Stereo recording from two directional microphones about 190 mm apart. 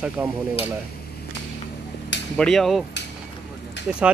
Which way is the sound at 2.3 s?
5° left (ahead or behind).